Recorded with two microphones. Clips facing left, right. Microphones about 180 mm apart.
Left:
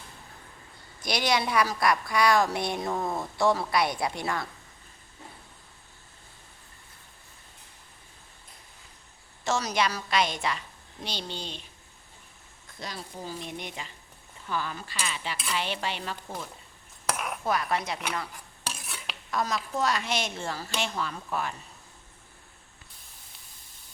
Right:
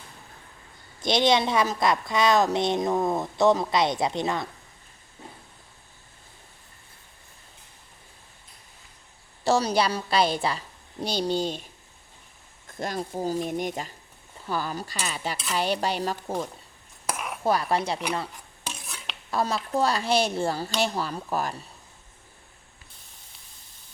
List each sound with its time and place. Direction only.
1.0 s a woman's voice: 25° right (ahead or behind)
9.4 s speech: 35° right (ahead or behind)
12.7 s speech: 50° right (ahead or behind)
17.1 s cutlery: centre (ahead or behind)
17.4 s speech: 30° right (ahead or behind)
18.7 s stir: 5° left (ahead or behind)
19.3 s speech: 30° right (ahead or behind)